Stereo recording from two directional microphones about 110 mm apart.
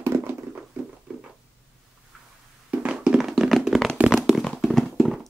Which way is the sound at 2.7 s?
10° right (ahead or behind).